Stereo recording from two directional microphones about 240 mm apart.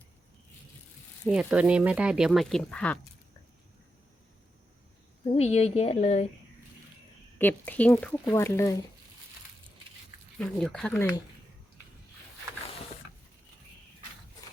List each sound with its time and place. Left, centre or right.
1.3 s speech: centre
5.3 s speech: left
7.3 s speech: centre
10.3 s speech: centre